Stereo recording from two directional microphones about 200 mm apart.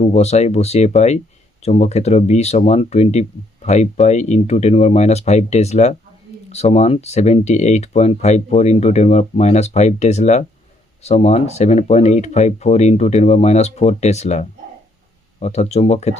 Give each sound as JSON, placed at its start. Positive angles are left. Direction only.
{"t": 0.0, "sound": "speech", "side_deg": 30}